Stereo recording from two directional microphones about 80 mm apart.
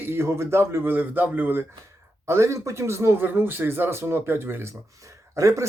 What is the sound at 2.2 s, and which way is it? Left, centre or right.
Speech, right.